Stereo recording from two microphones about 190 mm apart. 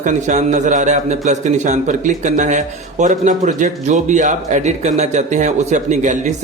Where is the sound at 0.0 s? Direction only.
40° right (ahead or behind).